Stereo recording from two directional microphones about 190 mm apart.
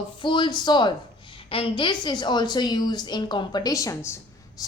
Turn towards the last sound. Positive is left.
turn(degrees=15)  # may be behind; listen again after turning